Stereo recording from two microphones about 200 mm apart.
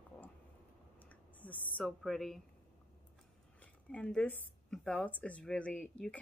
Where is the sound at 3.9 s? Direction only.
5° left (ahead or behind).